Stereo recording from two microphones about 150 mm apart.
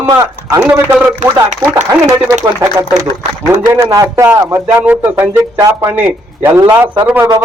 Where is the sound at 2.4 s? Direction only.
20° right (ahead or behind).